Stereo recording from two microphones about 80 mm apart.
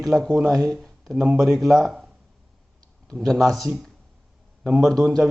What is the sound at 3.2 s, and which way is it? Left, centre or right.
A man's voice, centre.